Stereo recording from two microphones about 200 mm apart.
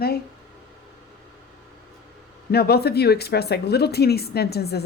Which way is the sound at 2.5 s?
50° left (ahead or behind).